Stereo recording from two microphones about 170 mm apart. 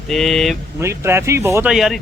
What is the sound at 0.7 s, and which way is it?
Speech, 15° right (ahead or behind).